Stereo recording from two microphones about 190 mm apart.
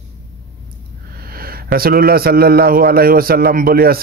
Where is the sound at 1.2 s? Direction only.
50° right (ahead or behind).